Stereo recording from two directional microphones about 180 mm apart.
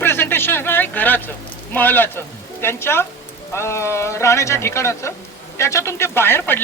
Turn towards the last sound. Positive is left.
turn(degrees=15)  # may be behind; listen again after turning